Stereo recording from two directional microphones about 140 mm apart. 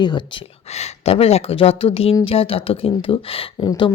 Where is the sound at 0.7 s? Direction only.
50° left (ahead or behind).